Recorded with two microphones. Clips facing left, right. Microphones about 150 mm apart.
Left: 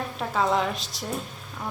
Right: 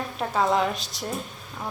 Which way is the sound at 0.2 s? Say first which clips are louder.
Right 2 dB; centre (ahead or behind).